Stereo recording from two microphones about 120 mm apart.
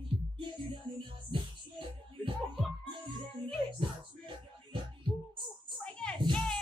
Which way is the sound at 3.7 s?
45° right (ahead or behind).